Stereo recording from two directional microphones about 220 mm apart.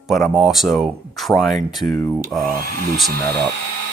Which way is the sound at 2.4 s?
40° right (ahead or behind).